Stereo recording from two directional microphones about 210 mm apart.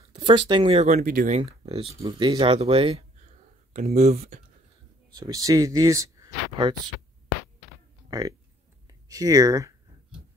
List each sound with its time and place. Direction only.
0.1 s speech: 25° right (ahead or behind)
5.1 s speech: 15° right (ahead or behind)
8.1 s speech: 15° right (ahead or behind)